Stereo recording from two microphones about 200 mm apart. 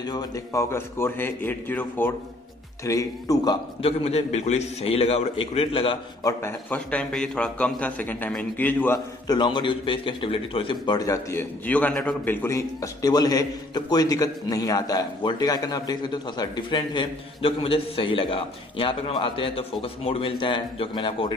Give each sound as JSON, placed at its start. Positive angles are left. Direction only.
{"t": 0.0, "sound": "a man's voice", "side_deg": 20}
{"t": 3.8, "sound": "a man's voice", "side_deg": 30}
{"t": 6.4, "sound": "a man's voice", "side_deg": 5}